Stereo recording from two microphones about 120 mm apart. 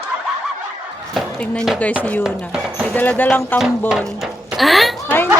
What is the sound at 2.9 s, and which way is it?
Speech, 15° left (ahead or behind).